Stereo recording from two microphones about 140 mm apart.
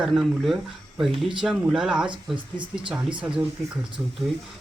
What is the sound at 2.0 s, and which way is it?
Speech, 35° right (ahead or behind).